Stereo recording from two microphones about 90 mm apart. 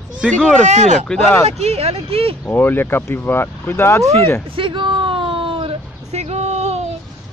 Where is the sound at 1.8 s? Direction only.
90° right.